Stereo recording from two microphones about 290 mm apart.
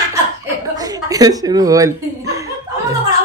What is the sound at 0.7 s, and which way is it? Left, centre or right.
Speech, centre.